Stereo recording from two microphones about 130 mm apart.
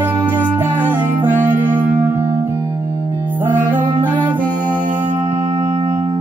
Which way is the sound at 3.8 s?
35° right (ahead or behind).